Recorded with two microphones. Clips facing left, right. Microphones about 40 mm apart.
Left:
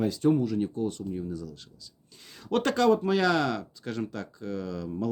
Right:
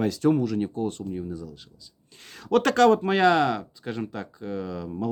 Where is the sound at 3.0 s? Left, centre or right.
Right; by 5.1 s centre.